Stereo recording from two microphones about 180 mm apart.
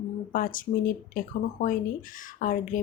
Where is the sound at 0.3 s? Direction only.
50° left (ahead or behind).